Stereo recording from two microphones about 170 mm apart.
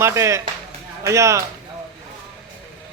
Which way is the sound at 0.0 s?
15° right (ahead or behind).